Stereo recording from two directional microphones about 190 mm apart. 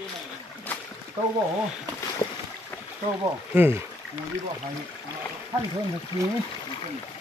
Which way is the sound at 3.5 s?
10° right (ahead or behind).